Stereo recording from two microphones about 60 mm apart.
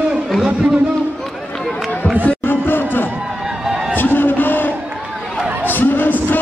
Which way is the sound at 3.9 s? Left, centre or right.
Left.